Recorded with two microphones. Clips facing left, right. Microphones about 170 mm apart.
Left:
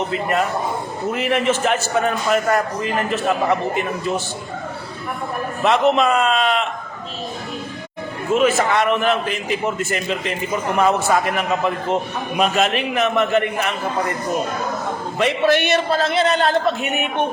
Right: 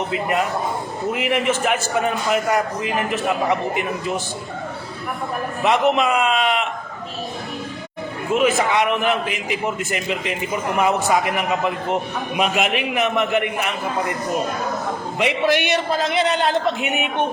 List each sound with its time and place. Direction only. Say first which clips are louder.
1.1 s a man's voice: left 2 dB; 15° right (ahead or behind)
5.6 s a man's voice: left 2 dB; 10° right (ahead or behind)
8.4 s a man's voice: left 1 dB; 15° right (ahead or behind)
15.2 s a man's voice: left 2 dB; 15° right (ahead or behind)